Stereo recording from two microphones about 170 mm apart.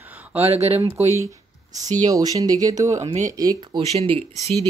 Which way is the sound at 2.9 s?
45° right (ahead or behind).